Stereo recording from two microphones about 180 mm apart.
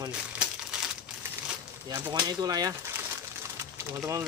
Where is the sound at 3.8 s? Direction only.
15° right (ahead or behind).